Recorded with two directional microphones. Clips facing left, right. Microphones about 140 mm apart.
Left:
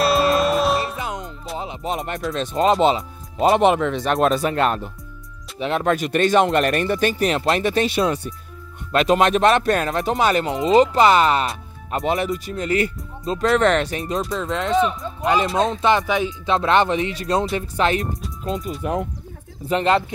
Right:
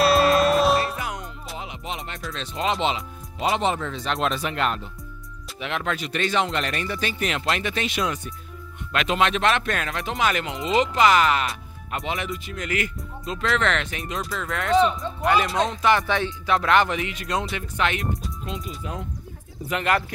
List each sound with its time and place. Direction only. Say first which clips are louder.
0.0 s music: even; centre (ahead or behind)
0.9 s music: left 3 dB; 25° left (ahead or behind)
1.6 s music: left 8 dB; 35° left (ahead or behind)
2.3 s speech: left 8 dB; 45° left (ahead or behind); by 4.0 s 70° left (ahead or behind)
4.0 s speech: left 7 dB; 45° left (ahead or behind)
10.7 s speech: left 5 dB; 30° left (ahead or behind)
12.0 s speech: left 8 dB; 45° left (ahead or behind)
14.3 s speech: left 5 dB; 25° left (ahead or behind)
14.7 s speech: right 1 dB; centre (ahead or behind)
15.2 s speech: left 3 dB; 25° left (ahead or behind)
18.4 s speech: left 7 dB; 45° left (ahead or behind)
18.8 s speech: left 10 dB; 60° left (ahead or behind)
19.7 s speech: left 5 dB; 30° left (ahead or behind)